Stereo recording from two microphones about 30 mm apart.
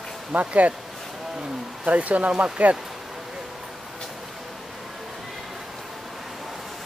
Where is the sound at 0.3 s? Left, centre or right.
Right.